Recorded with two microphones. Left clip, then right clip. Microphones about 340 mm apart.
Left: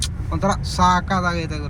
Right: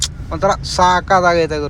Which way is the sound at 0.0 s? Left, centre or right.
Centre.